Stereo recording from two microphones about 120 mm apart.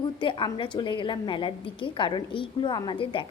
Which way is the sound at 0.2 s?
40° left (ahead or behind).